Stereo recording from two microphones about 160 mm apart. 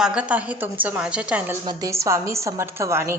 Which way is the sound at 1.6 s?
20° right (ahead or behind).